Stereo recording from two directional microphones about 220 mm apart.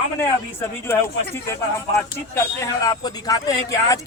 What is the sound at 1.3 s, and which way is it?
A man's voice, 10° left (ahead or behind).